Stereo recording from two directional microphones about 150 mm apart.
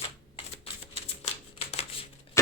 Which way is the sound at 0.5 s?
40° left (ahead or behind).